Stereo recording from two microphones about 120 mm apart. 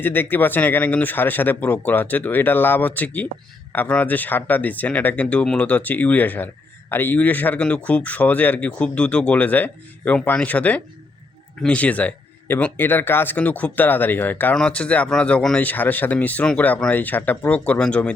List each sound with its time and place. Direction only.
0.0 s speech: 15° left (ahead or behind)